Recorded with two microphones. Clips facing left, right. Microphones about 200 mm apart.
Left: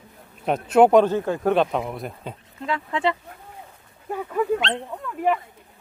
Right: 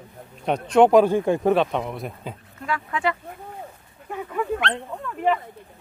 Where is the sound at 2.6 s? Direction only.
25° left (ahead or behind).